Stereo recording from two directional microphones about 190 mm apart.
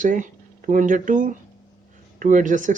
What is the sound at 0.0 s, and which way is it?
Speech, 45° right (ahead or behind).